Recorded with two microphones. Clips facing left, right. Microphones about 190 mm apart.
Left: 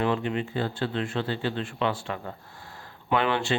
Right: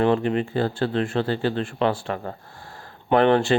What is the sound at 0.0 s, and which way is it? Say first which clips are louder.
Speech: right 6 dB; 40° right (ahead or behind).